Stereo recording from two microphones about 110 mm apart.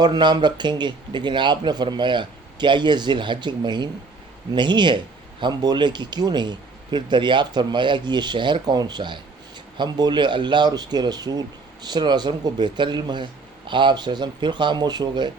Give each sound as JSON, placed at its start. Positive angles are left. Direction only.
{"t": 0.0, "sound": "speech", "side_deg": -40}